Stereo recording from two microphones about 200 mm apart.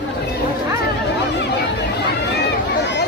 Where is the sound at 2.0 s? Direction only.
55° left (ahead or behind).